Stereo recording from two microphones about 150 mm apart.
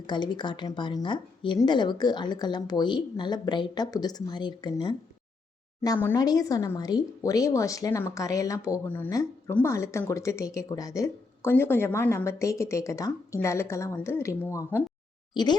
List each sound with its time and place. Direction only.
0.1 s a woman's voice: 30° left (ahead or behind)
6.1 s a woman's voice: 25° left (ahead or behind)